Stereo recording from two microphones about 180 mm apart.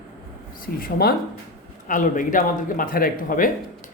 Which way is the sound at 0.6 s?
55° left (ahead or behind).